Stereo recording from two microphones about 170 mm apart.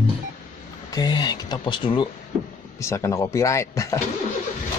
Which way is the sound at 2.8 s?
15° left (ahead or behind).